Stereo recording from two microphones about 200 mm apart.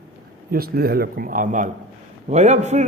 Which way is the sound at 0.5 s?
50° right (ahead or behind).